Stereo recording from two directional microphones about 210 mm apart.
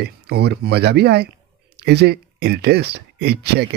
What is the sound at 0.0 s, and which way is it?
Speech, 50° right (ahead or behind).